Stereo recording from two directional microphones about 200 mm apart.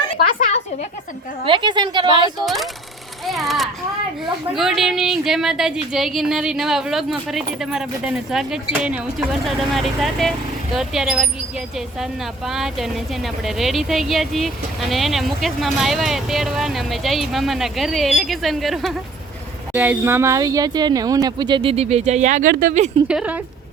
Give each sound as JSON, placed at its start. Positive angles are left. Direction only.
{"t": 0.3, "sound": "a sound", "side_deg": 35}
{"t": 1.5, "sound": "speech", "side_deg": -25}
{"t": 3.2, "sound": "a child's voice", "side_deg": 0}
{"t": 23.0, "sound": "speech", "side_deg": -5}